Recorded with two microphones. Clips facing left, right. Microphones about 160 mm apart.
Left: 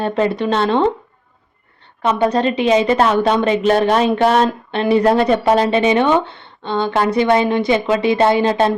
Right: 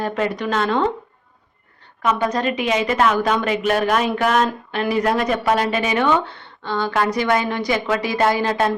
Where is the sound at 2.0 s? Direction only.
30° left (ahead or behind).